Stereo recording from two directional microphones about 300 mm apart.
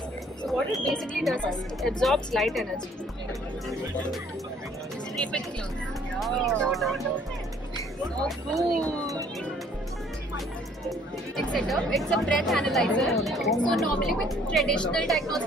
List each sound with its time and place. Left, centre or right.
0.5 s a woman's voice: centre
5.1 s a woman's voice: centre
8.2 s a woman's voice: centre
10.9 s a woman's voice: centre